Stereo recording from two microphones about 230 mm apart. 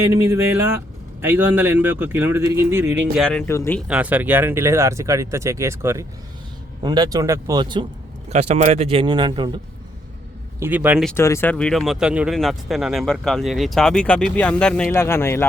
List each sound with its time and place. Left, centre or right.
0.0 s speech: centre
3.2 s speech: centre
3.8 s speech: centre
10.6 s speech: centre
11.1 s speech: centre